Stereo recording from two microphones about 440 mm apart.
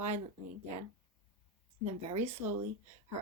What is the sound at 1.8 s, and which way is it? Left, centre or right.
Speech, centre.